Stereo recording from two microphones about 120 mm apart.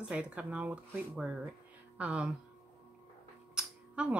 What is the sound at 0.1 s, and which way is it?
Speech, 10° right (ahead or behind).